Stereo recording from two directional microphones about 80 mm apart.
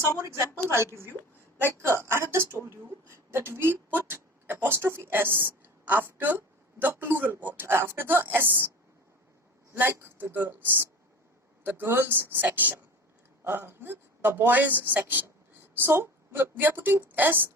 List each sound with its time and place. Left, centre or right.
0.2 s a woman's voice: right
1.8 s a woman's voice: right
9.7 s a woman's voice: right